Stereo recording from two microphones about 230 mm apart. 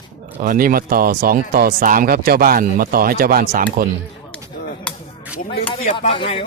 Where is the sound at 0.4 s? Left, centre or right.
Right.